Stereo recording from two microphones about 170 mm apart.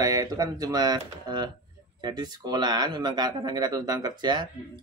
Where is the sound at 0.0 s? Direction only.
20° right (ahead or behind).